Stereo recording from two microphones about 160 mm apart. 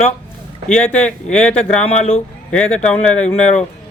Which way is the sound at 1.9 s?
40° left (ahead or behind).